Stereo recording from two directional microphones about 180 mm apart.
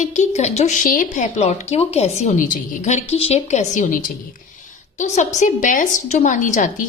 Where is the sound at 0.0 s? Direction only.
40° left (ahead or behind).